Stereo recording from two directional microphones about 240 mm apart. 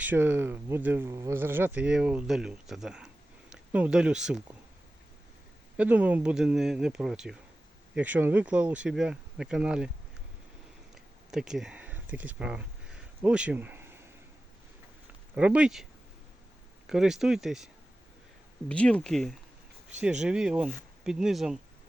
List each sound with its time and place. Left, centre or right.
0.0 s speech: centre
5.7 s speech: centre
10.9 s a sound: centre
15.4 s speech: centre
18.7 s speech: centre